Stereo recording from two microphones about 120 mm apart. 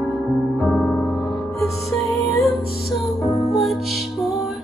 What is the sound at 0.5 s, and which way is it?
Music, 5° left (ahead or behind).